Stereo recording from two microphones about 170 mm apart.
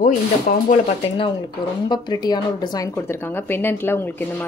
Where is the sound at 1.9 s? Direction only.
25° left (ahead or behind).